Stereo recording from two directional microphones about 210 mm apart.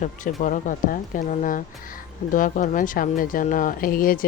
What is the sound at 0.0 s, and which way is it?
Speech, 40° left (ahead or behind).